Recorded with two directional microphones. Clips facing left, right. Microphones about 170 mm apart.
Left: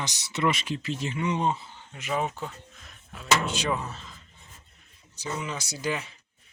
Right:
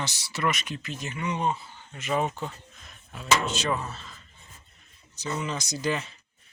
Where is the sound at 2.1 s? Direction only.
5° left (ahead or behind).